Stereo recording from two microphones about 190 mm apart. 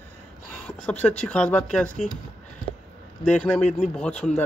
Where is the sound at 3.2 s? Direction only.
5° left (ahead or behind).